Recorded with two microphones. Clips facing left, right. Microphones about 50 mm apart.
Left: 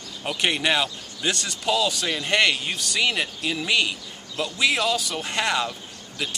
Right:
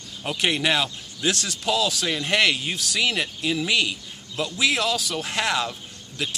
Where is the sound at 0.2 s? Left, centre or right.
Centre.